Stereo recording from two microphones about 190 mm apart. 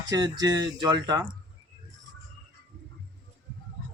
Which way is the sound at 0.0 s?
20° right (ahead or behind).